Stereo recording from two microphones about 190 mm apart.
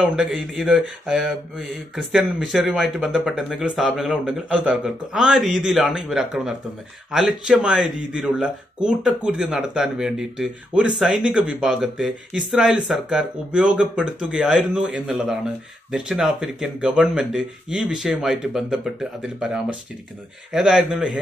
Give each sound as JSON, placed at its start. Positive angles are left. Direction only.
{"t": 0.0, "sound": "speech", "side_deg": -5}
{"t": 2.5, "sound": "speech", "side_deg": -5}